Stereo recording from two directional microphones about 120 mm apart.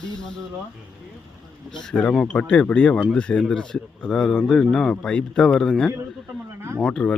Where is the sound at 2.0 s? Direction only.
5° left (ahead or behind).